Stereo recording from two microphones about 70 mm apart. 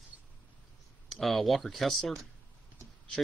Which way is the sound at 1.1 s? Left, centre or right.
Centre.